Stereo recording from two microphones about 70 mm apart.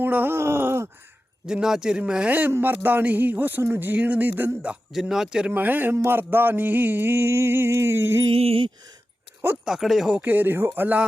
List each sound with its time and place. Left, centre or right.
0.0 s speech: right
0.3 s groan: right
1.5 s a man's voice: centre
2.3 s speech: right
3.6 s music: right
3.8 s speech: right
4.9 s a man's voice: centre
5.5 s speech: right
6.0 s music: right
9.6 s speech: centre
10.2 s speech: right